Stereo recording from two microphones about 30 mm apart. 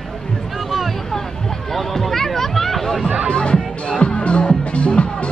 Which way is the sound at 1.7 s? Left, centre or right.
Centre.